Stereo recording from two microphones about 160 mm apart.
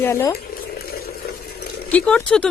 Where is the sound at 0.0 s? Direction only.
15° left (ahead or behind).